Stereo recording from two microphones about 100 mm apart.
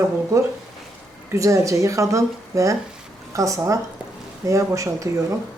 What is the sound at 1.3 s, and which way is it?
Speech, 30° right (ahead or behind).